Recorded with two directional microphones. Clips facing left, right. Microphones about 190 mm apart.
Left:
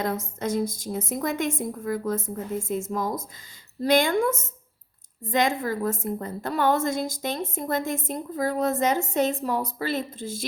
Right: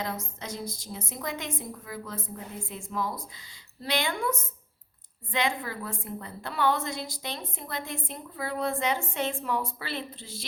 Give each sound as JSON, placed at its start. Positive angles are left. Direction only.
{"t": 0.0, "sound": "a woman's voice", "side_deg": 50}